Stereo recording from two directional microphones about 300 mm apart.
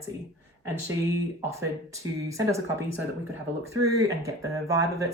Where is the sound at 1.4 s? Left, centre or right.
Centre.